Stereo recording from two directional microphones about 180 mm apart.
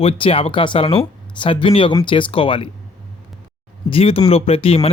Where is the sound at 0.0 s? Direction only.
30° left (ahead or behind).